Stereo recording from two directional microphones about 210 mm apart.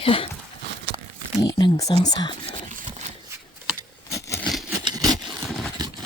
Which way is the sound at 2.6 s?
35° right (ahead or behind).